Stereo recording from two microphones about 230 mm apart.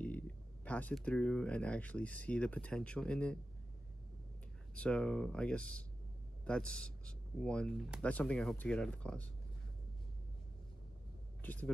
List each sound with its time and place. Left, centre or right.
0.7 s speech: centre
4.7 s speech: centre
11.4 s speech: centre